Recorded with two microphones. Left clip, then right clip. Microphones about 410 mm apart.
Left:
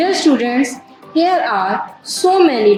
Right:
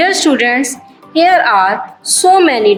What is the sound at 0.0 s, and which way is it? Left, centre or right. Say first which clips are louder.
A woman's voice: right 3 dB; centre.